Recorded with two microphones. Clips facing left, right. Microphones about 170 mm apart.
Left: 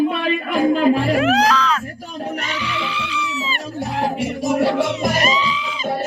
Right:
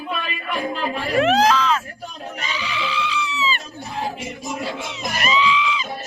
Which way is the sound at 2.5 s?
60° left (ahead or behind).